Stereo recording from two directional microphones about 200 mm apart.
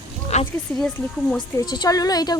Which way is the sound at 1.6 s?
20° left (ahead or behind).